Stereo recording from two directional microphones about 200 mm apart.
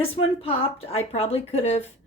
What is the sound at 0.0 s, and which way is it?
A woman's voice, 30° left (ahead or behind).